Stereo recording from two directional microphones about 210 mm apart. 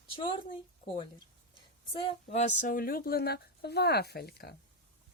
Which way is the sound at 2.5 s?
40° left (ahead or behind).